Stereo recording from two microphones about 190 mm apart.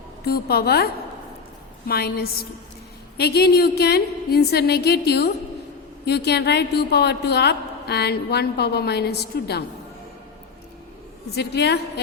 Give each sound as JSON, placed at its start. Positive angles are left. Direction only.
{"t": 0.3, "sound": "a woman's voice", "side_deg": 55}
{"t": 1.9, "sound": "a woman's voice", "side_deg": 55}
{"t": 11.3, "sound": "a woman's voice", "side_deg": 60}